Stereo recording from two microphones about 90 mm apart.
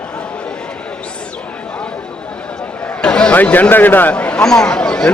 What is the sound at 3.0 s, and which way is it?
A man's voice, 10° left (ahead or behind).